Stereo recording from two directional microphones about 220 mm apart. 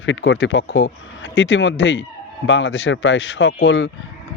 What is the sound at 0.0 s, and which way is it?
Speech, 55° left (ahead or behind).